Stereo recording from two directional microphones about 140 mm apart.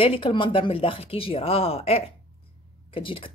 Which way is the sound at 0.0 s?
40° left (ahead or behind).